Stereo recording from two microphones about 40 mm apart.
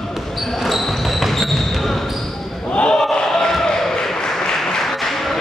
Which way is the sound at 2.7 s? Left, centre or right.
Left.